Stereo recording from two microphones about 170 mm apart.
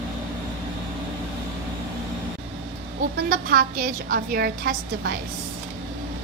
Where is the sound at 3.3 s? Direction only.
60° right (ahead or behind).